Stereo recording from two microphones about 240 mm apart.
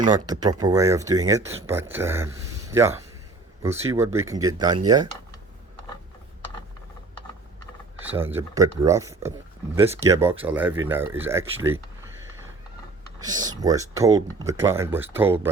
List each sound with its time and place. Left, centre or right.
0.0 s speech: centre
8.0 s speech: centre
13.1 s speech: centre